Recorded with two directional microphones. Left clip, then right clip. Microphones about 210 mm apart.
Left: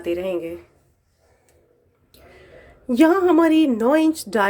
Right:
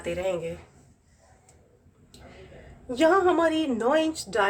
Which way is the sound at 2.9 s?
40° left (ahead or behind).